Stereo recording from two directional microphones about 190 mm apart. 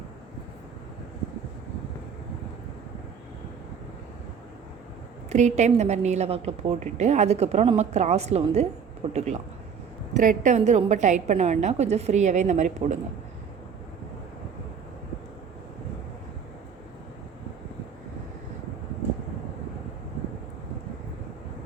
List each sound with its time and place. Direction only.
5.3 s a woman's voice: 35° right (ahead or behind)